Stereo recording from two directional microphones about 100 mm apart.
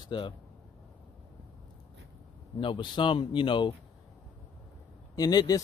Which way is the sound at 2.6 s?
55° left (ahead or behind).